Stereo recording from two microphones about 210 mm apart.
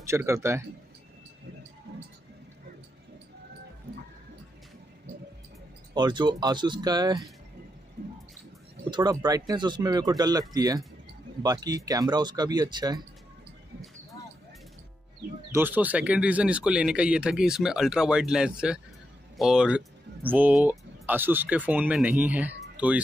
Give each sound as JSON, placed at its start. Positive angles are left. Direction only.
{"t": 0.0, "sound": "speech", "side_deg": -15}
{"t": 1.9, "sound": "a sound", "side_deg": -50}
{"t": 5.9, "sound": "speech", "side_deg": -20}
{"t": 8.9, "sound": "speech", "side_deg": -20}
{"t": 15.5, "sound": "speech", "side_deg": -10}